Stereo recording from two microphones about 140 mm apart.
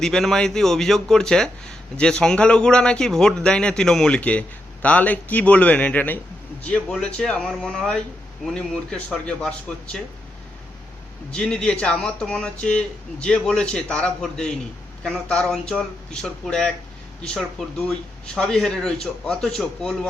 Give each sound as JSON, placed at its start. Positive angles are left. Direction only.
{"t": 0.0, "sound": "speech", "side_deg": 5}
{"t": 11.3, "sound": "speech", "side_deg": 5}